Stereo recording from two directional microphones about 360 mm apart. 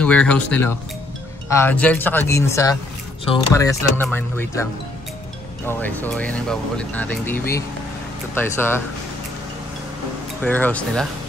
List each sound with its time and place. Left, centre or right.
0.0 s speech: centre
5.7 s speech: centre
10.4 s speech: centre